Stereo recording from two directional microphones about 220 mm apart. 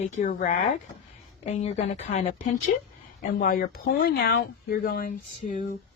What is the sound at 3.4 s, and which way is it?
Speech, 40° left (ahead or behind).